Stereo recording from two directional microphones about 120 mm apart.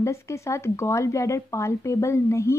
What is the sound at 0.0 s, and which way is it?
Speech, 25° left (ahead or behind).